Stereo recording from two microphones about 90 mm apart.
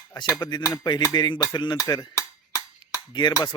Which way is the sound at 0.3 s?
50° left (ahead or behind).